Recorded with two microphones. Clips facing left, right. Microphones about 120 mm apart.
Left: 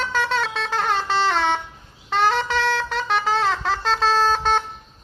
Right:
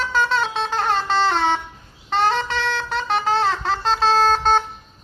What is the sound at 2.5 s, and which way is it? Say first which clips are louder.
Music: left 2 dB; 40° left (ahead or behind).